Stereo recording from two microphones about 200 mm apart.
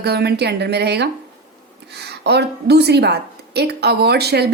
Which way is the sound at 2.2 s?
55° right (ahead or behind).